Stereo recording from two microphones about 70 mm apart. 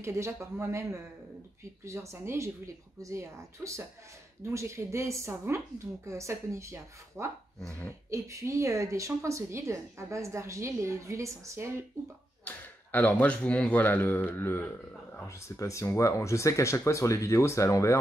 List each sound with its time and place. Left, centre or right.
0.0 s a woman's voice: right
7.6 s speech: left
8.1 s speech: right
12.4 s speech: left
15.2 s speech: left